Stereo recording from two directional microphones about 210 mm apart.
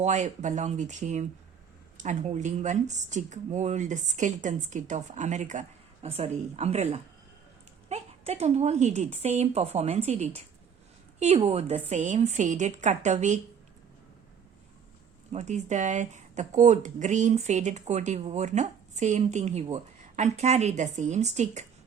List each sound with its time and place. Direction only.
0.0 s speech: 35° right (ahead or behind)
15.3 s speech: 35° right (ahead or behind)